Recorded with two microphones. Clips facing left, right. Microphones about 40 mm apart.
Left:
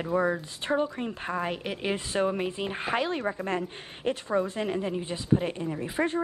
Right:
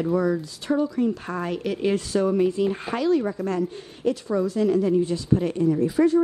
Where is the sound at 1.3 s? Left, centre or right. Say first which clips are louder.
Right 4 dB; left.